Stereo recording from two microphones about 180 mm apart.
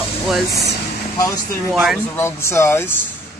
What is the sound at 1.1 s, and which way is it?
Speech, 20° left (ahead or behind).